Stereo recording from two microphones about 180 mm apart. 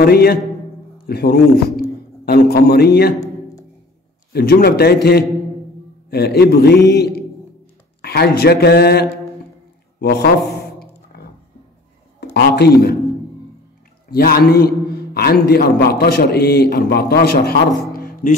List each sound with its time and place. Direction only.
0.0 s a man's voice: 60° left (ahead or behind)
4.3 s a man's voice: 60° left (ahead or behind)
9.9 s a sound: 60° left (ahead or behind)
12.4 s a man's voice: 65° left (ahead or behind)
14.1 s a man's voice: 60° left (ahead or behind)